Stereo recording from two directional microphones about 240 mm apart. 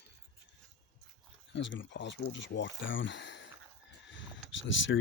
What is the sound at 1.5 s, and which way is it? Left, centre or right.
Speech, left.